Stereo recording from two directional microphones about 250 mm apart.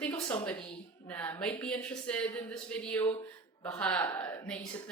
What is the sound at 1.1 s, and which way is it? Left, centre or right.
Speech, centre.